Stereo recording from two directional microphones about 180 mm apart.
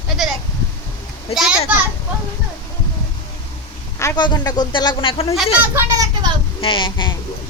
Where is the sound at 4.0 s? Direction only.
20° left (ahead or behind).